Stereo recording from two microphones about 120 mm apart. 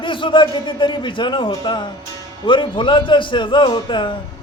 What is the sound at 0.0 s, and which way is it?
A man's voice, 45° left (ahead or behind).